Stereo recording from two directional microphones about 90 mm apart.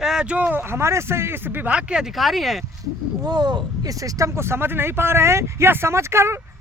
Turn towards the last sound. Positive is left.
turn(degrees=-30)  # may be behind; listen again after turning